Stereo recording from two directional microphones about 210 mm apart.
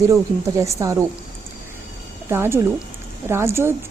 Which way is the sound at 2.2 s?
10° right (ahead or behind).